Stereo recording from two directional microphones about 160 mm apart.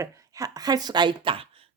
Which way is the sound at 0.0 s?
20° right (ahead or behind).